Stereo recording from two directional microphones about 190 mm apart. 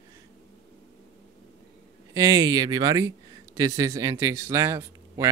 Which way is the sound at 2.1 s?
20° right (ahead or behind).